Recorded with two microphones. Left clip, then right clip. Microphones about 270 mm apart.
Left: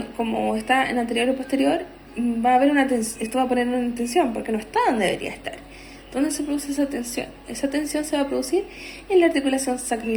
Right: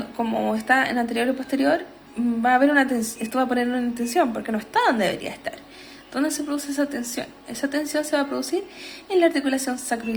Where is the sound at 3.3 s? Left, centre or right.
Right.